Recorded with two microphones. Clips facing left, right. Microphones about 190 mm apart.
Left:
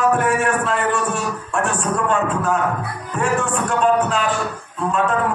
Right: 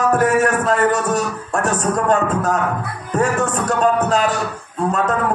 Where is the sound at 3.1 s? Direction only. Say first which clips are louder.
Right 3 dB; 40° right (ahead or behind).